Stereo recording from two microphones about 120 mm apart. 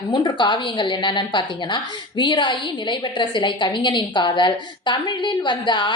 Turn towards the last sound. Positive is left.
turn(degrees=40)  # may be behind; listen again after turning